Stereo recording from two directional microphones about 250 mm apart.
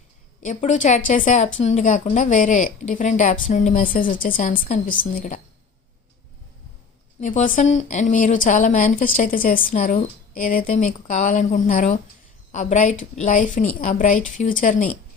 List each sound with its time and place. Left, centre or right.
0.4 s a woman's voice: left
7.2 s a woman's voice: left